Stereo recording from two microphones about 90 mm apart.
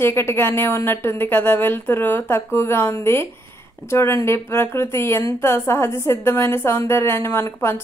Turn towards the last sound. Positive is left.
turn(degrees=30)  # may be behind; listen again after turning